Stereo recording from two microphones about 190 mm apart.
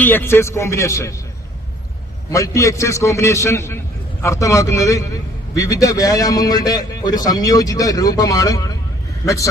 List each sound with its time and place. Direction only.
0.0 s a man's voice: 10° left (ahead or behind)
2.3 s a man's voice: 15° left (ahead or behind)